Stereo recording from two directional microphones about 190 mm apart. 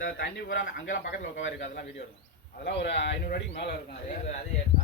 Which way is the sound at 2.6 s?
65° left (ahead or behind).